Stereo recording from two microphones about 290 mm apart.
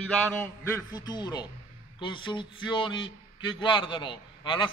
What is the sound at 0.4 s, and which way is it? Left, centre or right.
A man's voice, centre.